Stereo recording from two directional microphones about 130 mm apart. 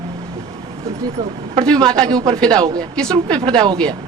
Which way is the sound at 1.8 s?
30° right (ahead or behind).